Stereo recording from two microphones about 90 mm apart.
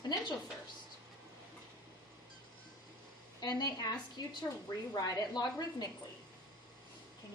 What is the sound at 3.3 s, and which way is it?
A woman's voice, 50° left (ahead or behind).